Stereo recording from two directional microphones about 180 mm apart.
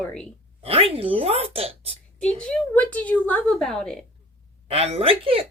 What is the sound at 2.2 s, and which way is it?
Speech, 5° left (ahead or behind).